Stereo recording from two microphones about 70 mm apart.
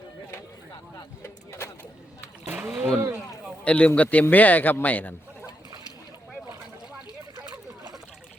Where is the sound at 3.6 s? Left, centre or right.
Centre.